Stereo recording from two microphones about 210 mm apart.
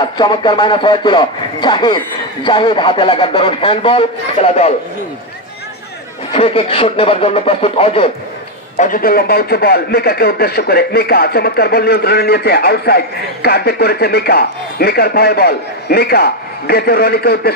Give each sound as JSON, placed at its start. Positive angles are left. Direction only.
{"t": 0.2, "sound": "a man's voice", "side_deg": 20}
{"t": 6.3, "sound": "a man's voice", "side_deg": 25}
{"t": 8.7, "sound": "speech", "side_deg": 40}